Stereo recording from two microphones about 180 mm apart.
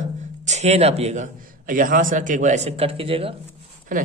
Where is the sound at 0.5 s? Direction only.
35° right (ahead or behind).